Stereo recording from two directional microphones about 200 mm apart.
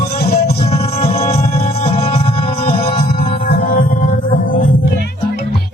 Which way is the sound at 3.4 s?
45° left (ahead or behind).